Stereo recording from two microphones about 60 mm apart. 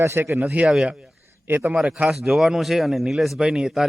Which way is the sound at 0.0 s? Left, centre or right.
Right.